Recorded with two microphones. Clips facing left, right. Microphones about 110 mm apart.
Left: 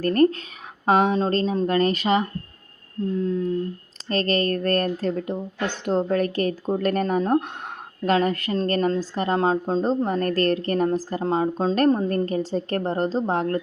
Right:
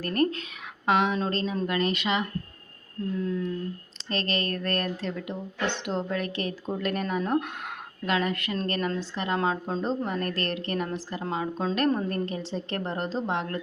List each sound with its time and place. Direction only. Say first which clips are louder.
0.0 s a woman's voice: left 7 dB; 40° left (ahead or behind)
3.2 s a woman's voice: left 6 dB; 30° left (ahead or behind)